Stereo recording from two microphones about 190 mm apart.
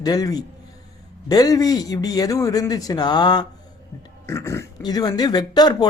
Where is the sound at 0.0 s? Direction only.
20° left (ahead or behind).